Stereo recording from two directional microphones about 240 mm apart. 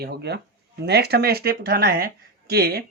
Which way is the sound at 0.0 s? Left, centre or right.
Right.